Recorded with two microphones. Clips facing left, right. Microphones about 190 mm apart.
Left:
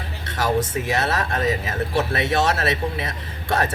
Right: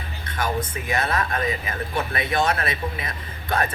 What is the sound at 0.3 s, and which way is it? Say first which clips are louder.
Speech: left 4 dB; 80° left.